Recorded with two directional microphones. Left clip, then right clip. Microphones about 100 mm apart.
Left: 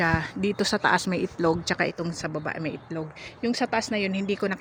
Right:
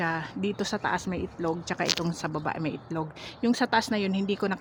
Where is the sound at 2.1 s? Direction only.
25° right (ahead or behind).